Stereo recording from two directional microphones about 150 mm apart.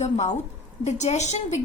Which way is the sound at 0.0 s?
50° left (ahead or behind).